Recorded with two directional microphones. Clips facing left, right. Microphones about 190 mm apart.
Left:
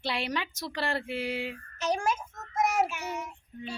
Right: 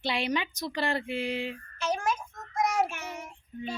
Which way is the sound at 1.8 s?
35° left (ahead or behind).